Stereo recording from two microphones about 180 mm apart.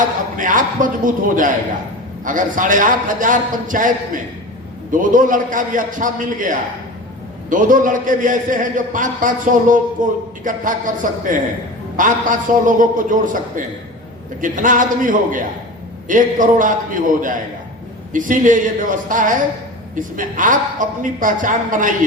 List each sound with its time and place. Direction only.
0.0 s a man's voice: 45° right (ahead or behind)